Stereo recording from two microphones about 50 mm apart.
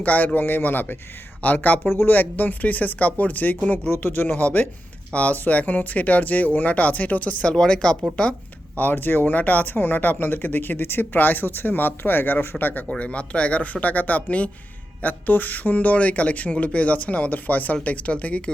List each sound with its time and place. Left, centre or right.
0.0 s speech: left
1.8 s speech: left
7.5 s speech: centre
8.1 s a sound: left
8.8 s speech: left
13.0 s speech: left